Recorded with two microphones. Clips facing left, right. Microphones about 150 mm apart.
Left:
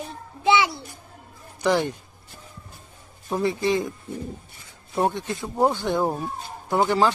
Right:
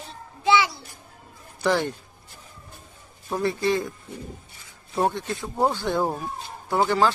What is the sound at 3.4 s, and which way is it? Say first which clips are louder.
Speech: left 1 dB; 20° left (ahead or behind).